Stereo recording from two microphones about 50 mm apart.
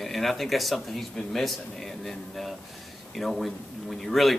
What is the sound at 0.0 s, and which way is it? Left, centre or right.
Speech, centre.